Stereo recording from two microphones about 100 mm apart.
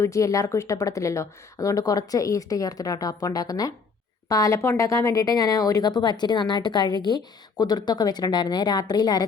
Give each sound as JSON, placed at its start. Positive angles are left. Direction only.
{"t": 0.0, "sound": "a woman's voice", "side_deg": 30}